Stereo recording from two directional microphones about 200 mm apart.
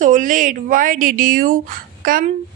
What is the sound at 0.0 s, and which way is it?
A woman's voice, 40° right (ahead or behind).